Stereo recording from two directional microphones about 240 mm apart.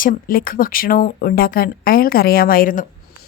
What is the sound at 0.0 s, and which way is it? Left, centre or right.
A woman's voice, left.